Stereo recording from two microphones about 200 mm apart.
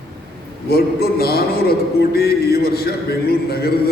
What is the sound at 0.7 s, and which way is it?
A man's voice, 50° left (ahead or behind).